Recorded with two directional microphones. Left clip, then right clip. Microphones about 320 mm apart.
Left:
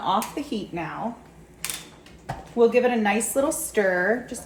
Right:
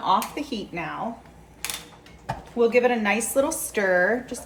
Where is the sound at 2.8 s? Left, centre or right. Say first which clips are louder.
Even; centre.